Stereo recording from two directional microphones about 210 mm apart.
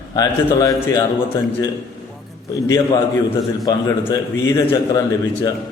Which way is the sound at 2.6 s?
15° left (ahead or behind).